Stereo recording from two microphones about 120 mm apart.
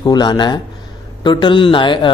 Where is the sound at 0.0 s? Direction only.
35° left (ahead or behind).